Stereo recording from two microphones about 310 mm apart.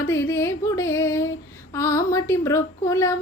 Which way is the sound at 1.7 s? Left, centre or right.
Centre.